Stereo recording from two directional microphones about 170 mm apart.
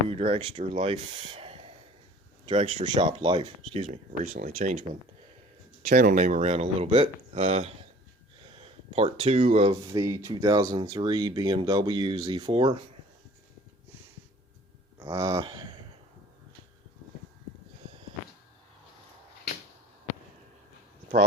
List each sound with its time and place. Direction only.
0.1 s speech: 40° right (ahead or behind)
3.0 s speech: 30° right (ahead or behind); by 4.9 s 45° right (ahead or behind)
5.9 s speech: 55° right (ahead or behind); by 9.7 s 35° right (ahead or behind)
9.8 s speech: 20° right (ahead or behind)
15.1 s speech: 15° right (ahead or behind)